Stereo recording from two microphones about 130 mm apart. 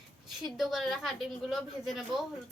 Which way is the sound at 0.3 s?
Centre (ahead or behind).